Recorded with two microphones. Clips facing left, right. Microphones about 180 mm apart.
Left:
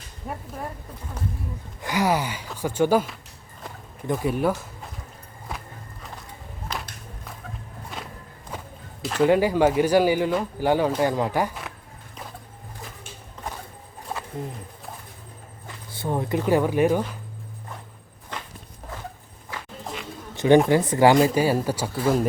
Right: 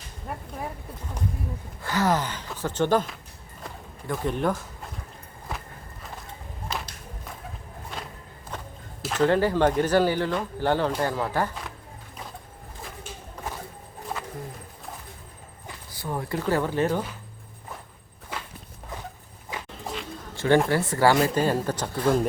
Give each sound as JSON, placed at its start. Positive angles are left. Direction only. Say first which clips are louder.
{"t": 1.8, "sound": "speech", "louder": "left 1 dB", "side_deg": 15}
{"t": 4.0, "sound": "speech", "louder": "left 4 dB", "side_deg": 20}
{"t": 4.3, "sound": "speech", "louder": "left 2 dB", "side_deg": 5}
{"t": 8.5, "sound": "walk", "louder": "left 1 dB", "side_deg": 0}
{"t": 9.1, "sound": "speech", "louder": "left 2 dB", "side_deg": 10}
{"t": 15.9, "sound": "speech", "louder": "left 5 dB", "side_deg": 25}
{"t": 18.3, "sound": "walk", "louder": "even", "side_deg": -10}
{"t": 19.5, "sound": "a sound", "louder": "right 1 dB", "side_deg": -20}
{"t": 20.3, "sound": "a sound", "louder": "left 4 dB", "side_deg": 20}
{"t": 20.7, "sound": "speech", "louder": "left 4 dB", "side_deg": 20}